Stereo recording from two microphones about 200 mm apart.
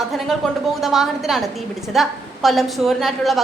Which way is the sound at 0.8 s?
Centre (ahead or behind).